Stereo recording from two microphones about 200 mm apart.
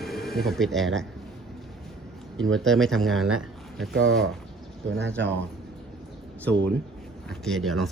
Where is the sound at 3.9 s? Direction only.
75° right (ahead or behind).